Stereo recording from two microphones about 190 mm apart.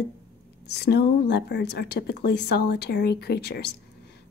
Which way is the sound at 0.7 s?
60° left (ahead or behind).